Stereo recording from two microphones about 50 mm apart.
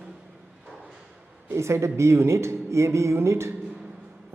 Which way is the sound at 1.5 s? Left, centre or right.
Right.